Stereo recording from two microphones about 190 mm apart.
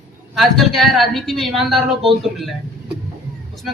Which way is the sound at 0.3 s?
Centre (ahead or behind).